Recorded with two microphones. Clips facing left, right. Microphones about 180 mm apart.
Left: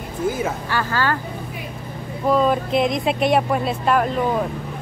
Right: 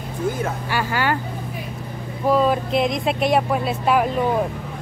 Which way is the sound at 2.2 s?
5° right (ahead or behind).